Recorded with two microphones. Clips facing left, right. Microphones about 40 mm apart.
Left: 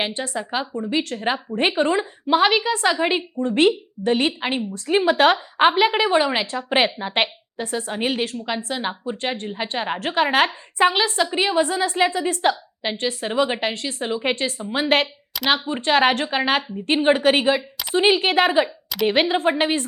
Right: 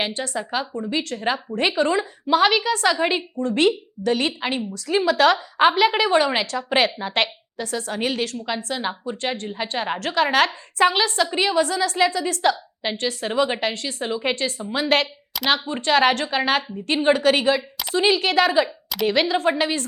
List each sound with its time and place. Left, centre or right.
0.5 s a woman's voice: left
13.8 s speech: centre
14.7 s a woman's voice: left
15.4 s a woman's voice: centre